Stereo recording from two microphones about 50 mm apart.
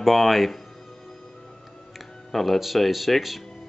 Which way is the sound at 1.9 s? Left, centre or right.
Centre.